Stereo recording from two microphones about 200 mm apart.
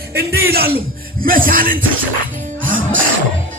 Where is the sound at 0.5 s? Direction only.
50° right (ahead or behind).